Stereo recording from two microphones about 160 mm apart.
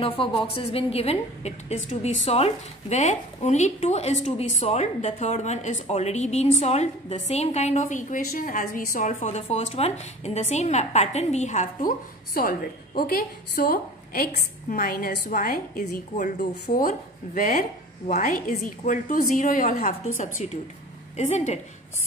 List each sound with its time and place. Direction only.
0.0 s a woman's voice: 35° left (ahead or behind)
12.4 s a woman's voice: 65° left (ahead or behind); by 21.5 s 50° left (ahead or behind)